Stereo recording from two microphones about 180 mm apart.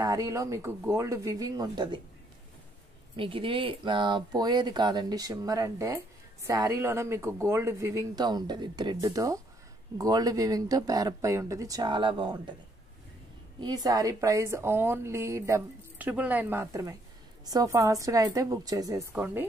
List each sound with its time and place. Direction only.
0.0 s speech: 20° right (ahead or behind)
3.2 s speech: 30° right (ahead or behind)
13.6 s speech: 20° right (ahead or behind)
19.1 s speech: 10° right (ahead or behind)